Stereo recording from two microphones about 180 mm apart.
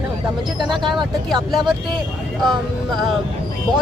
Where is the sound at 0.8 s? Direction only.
25° right (ahead or behind).